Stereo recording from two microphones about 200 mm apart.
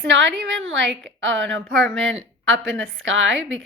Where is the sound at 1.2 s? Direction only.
65° right (ahead or behind).